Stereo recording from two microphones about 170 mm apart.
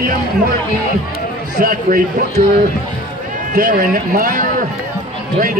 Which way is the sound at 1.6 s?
55° right (ahead or behind).